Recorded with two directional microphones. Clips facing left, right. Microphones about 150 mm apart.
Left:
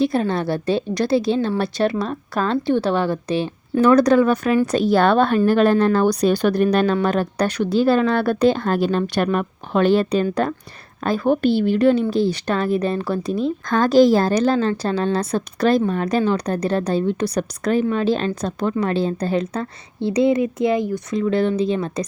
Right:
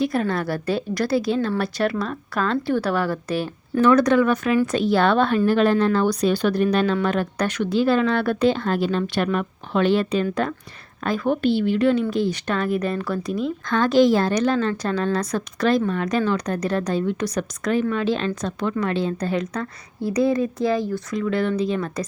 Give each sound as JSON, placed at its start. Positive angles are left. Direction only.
{"t": 0.0, "sound": "a woman's voice", "side_deg": 25}
{"t": 3.8, "sound": "a woman's voice", "side_deg": 40}